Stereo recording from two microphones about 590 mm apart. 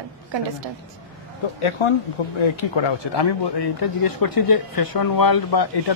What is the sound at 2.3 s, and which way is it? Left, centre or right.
Speech, left.